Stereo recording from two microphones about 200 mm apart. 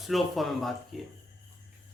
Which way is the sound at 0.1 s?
Centre (ahead or behind).